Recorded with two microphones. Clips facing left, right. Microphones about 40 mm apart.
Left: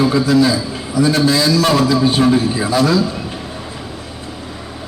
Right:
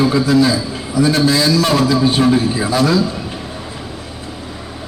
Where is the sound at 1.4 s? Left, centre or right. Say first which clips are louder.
Even; centre.